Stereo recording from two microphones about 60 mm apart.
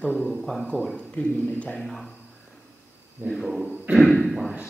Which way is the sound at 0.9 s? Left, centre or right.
Left.